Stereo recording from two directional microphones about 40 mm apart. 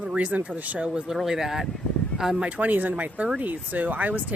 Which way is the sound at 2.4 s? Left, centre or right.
Right.